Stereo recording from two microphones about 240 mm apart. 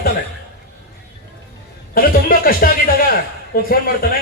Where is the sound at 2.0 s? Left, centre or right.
Left.